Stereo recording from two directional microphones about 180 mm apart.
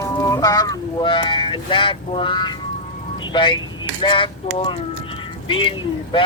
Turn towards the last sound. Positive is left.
turn(degrees=30)  # may be behind; listen again after turning